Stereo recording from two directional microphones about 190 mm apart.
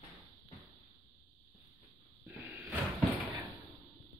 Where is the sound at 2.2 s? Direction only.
5° right (ahead or behind).